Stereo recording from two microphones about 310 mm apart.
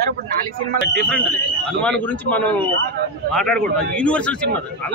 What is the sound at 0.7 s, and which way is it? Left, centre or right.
Speech, right.